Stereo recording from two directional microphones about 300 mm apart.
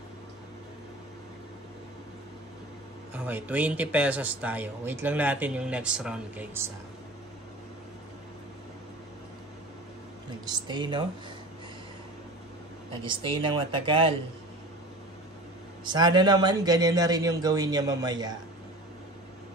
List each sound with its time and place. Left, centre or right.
3.2 s speech: centre
10.4 s a man's voice: centre
13.0 s a man's voice: centre
15.8 s a man's voice: centre